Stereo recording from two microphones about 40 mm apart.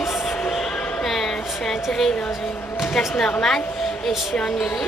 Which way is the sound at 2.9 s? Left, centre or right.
Centre.